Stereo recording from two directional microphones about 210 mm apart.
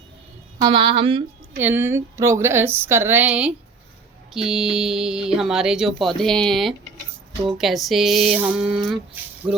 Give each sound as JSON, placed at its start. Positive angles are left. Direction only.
{"t": 0.7, "sound": "speech", "side_deg": -25}
{"t": 1.6, "sound": "speech", "side_deg": -10}